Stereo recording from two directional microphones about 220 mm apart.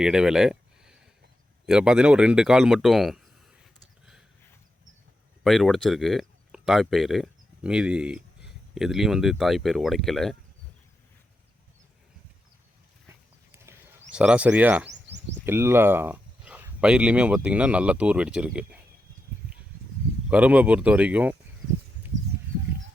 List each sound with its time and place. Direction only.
0.0 s a sound: 5° right (ahead or behind)
1.6 s speech: 5° right (ahead or behind)
3.6 s a sound: centre (ahead or behind)
5.4 s speech: centre (ahead or behind)
13.5 s horse: 10° right (ahead or behind)
14.1 s speech: 5° right (ahead or behind)
14.8 s a sound: 55° right (ahead or behind)
15.4 s speech: 10° right (ahead or behind)
20.3 s speech: 5° right (ahead or behind)